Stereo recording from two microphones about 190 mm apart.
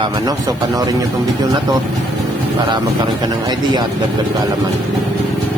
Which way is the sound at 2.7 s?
20° right (ahead or behind).